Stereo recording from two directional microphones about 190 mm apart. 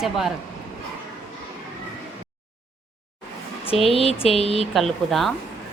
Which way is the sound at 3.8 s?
30° left (ahead or behind).